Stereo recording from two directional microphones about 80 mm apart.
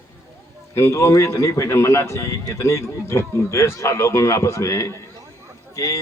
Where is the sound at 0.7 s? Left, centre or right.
Left.